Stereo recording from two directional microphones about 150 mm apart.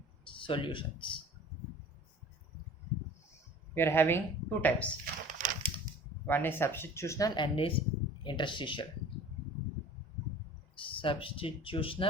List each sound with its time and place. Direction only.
0.3 s speech: 35° left (ahead or behind)
3.8 s speech: 15° left (ahead or behind)
5.4 s a sound: 60° right (ahead or behind)
6.2 s speech: 15° left (ahead or behind); by 8.9 s 30° left (ahead or behind)
10.8 s speech: 35° left (ahead or behind)